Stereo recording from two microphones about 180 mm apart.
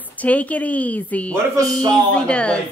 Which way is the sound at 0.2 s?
10° left (ahead or behind).